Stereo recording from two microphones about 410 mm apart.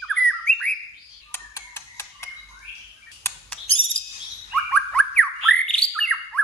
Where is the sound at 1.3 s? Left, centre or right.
Centre.